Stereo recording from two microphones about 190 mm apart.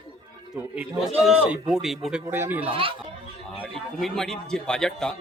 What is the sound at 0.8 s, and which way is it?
Speech, 5° right (ahead or behind).